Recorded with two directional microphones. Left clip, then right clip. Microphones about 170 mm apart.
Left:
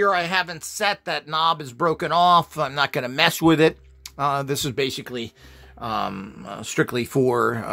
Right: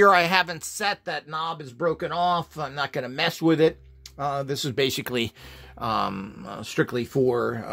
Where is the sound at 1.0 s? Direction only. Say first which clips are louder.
Left 8 dB; 20° left (ahead or behind).